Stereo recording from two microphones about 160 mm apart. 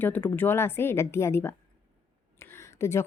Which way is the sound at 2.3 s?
15° left (ahead or behind).